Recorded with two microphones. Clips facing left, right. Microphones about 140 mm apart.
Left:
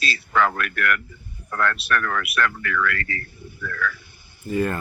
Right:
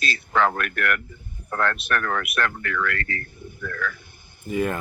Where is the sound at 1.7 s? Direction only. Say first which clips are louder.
Left 1 dB; 45° right (ahead or behind).